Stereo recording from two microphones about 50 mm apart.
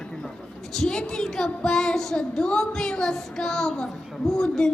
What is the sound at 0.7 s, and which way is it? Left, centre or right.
Speech, centre.